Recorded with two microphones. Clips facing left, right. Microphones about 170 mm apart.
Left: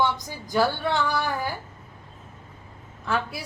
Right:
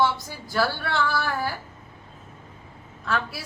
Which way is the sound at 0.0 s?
15° left (ahead or behind).